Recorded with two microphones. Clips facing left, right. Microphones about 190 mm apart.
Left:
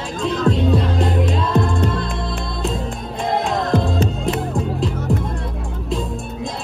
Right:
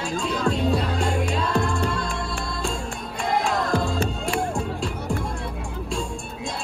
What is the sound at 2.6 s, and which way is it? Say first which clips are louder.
Music: left 6 dB; centre (ahead or behind).